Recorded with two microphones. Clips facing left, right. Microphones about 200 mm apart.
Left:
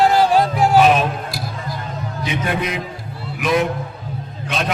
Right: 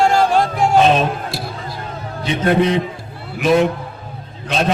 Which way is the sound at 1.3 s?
25° right (ahead or behind).